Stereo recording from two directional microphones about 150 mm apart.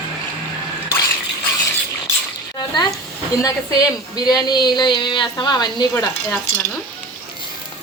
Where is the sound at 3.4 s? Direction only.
25° left (ahead or behind).